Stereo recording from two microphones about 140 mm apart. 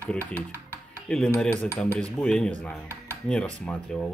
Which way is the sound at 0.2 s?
15° right (ahead or behind).